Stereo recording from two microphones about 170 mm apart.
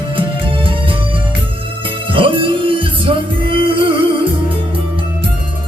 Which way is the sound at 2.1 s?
30° right (ahead or behind).